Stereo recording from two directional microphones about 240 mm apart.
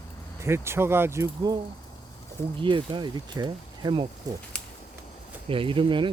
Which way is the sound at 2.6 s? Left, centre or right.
Centre.